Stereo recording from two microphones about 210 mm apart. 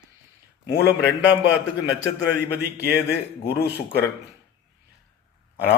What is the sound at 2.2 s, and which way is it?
A man's voice, 55° left (ahead or behind).